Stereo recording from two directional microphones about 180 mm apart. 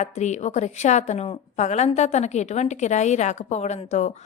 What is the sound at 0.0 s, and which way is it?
A woman's voice, 40° left (ahead or behind).